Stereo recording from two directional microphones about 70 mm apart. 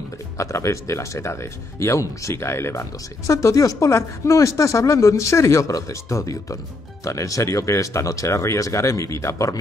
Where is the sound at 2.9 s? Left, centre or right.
Left.